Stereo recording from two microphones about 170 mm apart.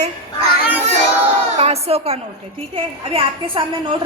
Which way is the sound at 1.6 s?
40° right (ahead or behind).